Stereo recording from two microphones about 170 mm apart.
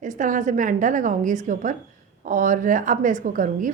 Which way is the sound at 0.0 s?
50° right (ahead or behind).